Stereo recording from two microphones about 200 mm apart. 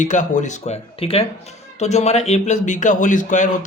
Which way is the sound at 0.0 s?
40° left (ahead or behind).